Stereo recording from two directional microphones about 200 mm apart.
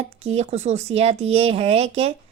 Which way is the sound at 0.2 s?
30° right (ahead or behind).